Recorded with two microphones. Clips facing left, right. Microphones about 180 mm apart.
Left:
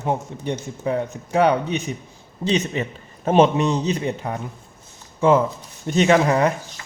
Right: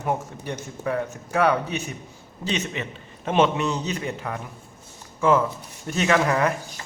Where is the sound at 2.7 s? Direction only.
40° left (ahead or behind).